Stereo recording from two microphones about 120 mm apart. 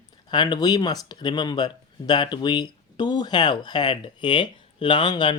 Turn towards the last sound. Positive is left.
turn(degrees=40)  # may be behind; listen again after turning